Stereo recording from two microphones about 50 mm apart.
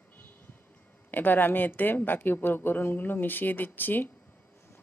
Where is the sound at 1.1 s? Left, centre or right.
Left.